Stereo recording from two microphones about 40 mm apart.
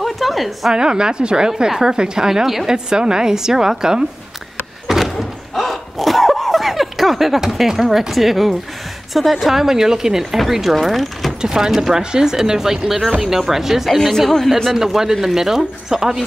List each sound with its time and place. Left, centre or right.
0.0 s a sound: centre
0.7 s a woman's voice: centre
4.8 s door: centre
5.5 s a sound: centre
7.3 s a woman's voice: centre
11.4 s a woman's voice: centre